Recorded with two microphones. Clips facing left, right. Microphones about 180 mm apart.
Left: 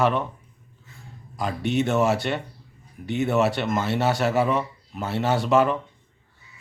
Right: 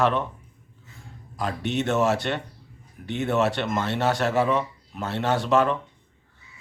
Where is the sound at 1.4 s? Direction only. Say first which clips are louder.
Left 3 dB; centre (ahead or behind).